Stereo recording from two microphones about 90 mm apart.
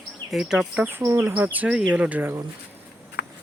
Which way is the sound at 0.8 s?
25° right (ahead or behind).